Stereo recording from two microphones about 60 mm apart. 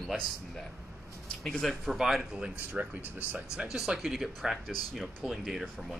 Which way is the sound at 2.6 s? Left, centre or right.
Right.